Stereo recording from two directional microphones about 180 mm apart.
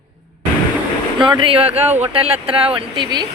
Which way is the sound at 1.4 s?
30° right (ahead or behind).